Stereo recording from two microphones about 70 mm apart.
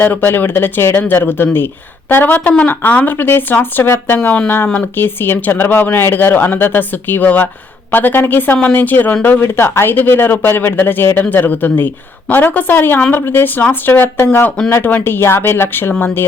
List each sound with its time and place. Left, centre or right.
0.0 s speech: left